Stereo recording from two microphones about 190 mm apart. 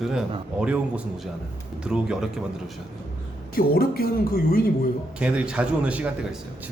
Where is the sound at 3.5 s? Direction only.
50° left (ahead or behind).